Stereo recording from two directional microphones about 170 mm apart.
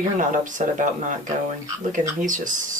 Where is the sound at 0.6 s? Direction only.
45° right (ahead or behind).